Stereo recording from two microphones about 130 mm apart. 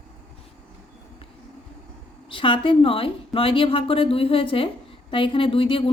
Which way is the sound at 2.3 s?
40° left (ahead or behind).